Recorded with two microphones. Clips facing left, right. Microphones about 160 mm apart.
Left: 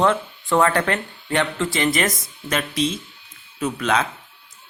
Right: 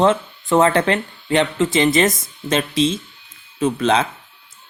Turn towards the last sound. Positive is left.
turn(degrees=-30)  # may be behind; listen again after turning